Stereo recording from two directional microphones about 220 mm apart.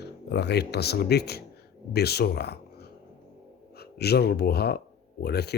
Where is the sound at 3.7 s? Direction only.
45° left (ahead or behind).